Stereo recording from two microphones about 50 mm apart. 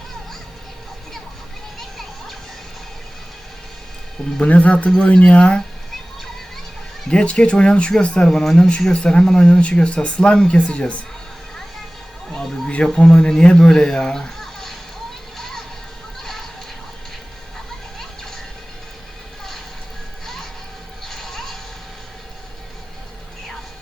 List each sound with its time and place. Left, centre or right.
4.4 s speech: left
7.1 s speech: centre
12.3 s music: centre
12.8 s speech: centre
20.2 s music: centre